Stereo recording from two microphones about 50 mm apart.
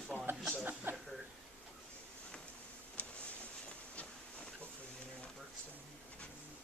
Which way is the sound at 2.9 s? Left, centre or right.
Left.